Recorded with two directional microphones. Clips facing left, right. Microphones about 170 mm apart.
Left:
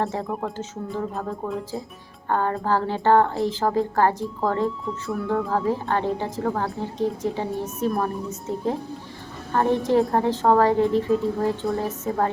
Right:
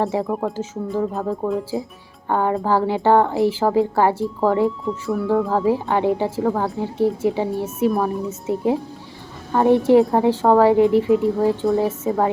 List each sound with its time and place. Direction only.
0.3 s speech: centre (ahead or behind)
2.3 s a woman's voice: 10° right (ahead or behind)